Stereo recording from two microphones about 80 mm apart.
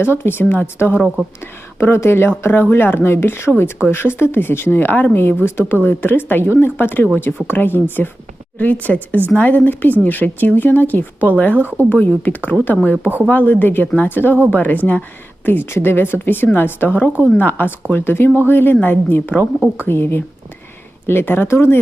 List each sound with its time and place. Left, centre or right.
0.0 s a woman's voice: left
0.9 s speech: centre
1.4 s a woman's voice: left
11.5 s a woman's voice: right
11.9 s a woman's voice: left